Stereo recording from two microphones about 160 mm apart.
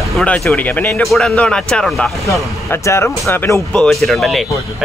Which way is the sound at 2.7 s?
15° left (ahead or behind).